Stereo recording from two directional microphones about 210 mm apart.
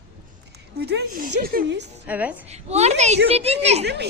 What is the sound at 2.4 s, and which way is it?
A woman's voice, 30° right (ahead or behind).